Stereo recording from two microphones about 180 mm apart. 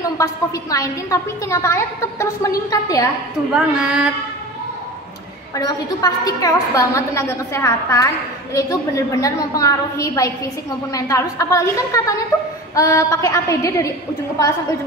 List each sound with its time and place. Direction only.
0.2 s a woman's voice: 20° left (ahead or behind)
3.5 s speech: 5° right (ahead or behind)
5.6 s a woman's voice: 20° left (ahead or behind)